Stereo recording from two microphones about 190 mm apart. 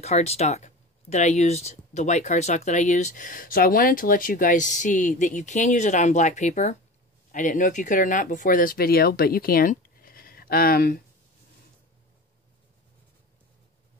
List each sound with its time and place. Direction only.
0.0 s speech: 35° left (ahead or behind); by 11.0 s 50° left (ahead or behind)